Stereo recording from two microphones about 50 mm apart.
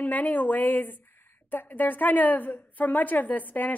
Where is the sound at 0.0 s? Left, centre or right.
Left.